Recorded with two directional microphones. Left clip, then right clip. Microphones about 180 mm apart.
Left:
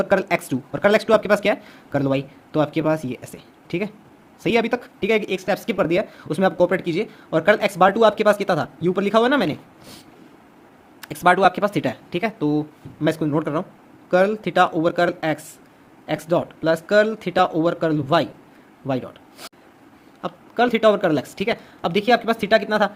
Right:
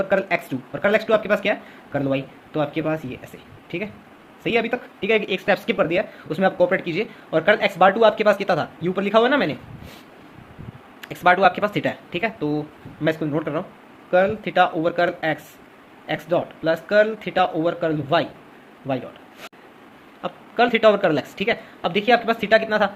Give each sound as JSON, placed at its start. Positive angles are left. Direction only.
{"t": 0.0, "sound": "speech", "side_deg": 45}
{"t": 11.0, "sound": "speech", "side_deg": 40}